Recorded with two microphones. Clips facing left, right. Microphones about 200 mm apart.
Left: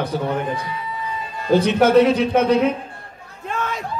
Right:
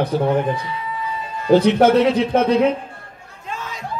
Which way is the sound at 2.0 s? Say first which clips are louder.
Even; 60° right (ahead or behind).